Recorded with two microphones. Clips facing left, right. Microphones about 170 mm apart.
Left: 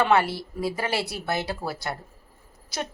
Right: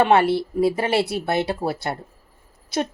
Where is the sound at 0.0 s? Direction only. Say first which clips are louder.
Right 5 dB; 25° right (ahead or behind).